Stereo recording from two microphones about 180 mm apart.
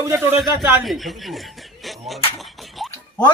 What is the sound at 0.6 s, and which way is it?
Speech, centre (ahead or behind).